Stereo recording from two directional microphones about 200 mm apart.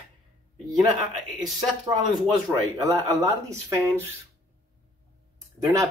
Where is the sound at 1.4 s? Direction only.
20° right (ahead or behind).